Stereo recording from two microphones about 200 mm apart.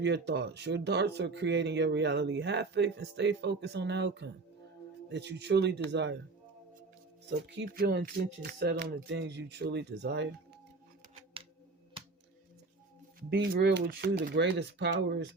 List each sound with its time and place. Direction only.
0.0 s speech: 60° right (ahead or behind)
7.4 s speech: 55° right (ahead or behind)
13.3 s speech: 55° right (ahead or behind)